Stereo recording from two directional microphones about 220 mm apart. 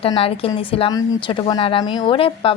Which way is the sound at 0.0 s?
25° left (ahead or behind).